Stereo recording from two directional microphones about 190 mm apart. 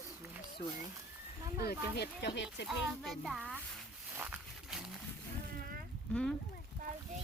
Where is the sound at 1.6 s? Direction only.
60° left (ahead or behind).